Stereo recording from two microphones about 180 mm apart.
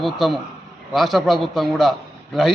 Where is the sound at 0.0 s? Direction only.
Centre (ahead or behind).